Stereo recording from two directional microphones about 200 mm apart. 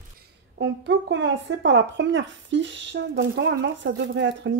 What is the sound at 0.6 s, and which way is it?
Speech, 65° right (ahead or behind).